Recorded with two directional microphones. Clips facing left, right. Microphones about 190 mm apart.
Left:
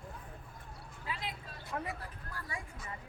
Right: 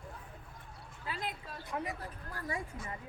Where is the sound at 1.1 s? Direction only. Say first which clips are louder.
Right 2 dB; 50° right (ahead or behind).